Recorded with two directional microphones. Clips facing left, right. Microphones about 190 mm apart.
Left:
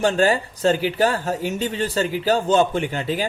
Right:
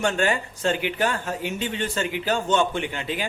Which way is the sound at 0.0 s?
35° left (ahead or behind).